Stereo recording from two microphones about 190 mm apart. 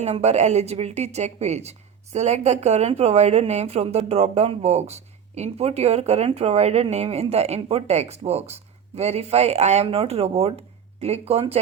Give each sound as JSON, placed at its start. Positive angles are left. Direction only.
{"t": 0.0, "sound": "a woman's voice", "side_deg": -35}